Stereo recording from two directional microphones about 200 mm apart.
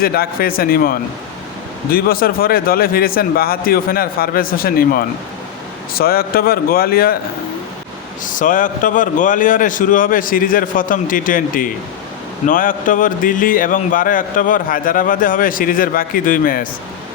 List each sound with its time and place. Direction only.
0.0 s a man's voice: 50° left (ahead or behind)
8.2 s a man's voice: 40° left (ahead or behind)